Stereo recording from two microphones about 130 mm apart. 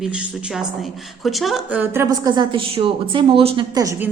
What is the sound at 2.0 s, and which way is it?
Speech, 30° right (ahead or behind).